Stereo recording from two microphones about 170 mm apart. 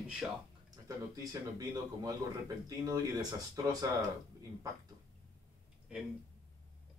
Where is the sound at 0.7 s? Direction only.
20° right (ahead or behind).